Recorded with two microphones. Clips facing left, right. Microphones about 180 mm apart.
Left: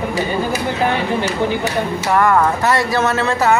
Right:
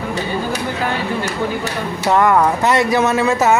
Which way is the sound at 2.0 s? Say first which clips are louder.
Right 2 dB; 15° right (ahead or behind).